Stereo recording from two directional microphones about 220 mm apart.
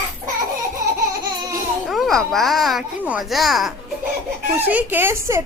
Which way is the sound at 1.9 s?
Centre (ahead or behind).